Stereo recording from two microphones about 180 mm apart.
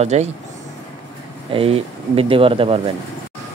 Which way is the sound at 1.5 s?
30° right (ahead or behind).